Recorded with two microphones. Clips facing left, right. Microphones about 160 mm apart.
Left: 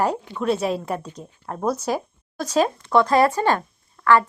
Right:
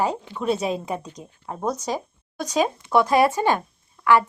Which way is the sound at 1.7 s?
10° left (ahead or behind).